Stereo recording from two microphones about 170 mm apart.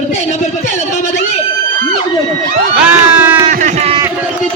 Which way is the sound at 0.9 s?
45° left (ahead or behind).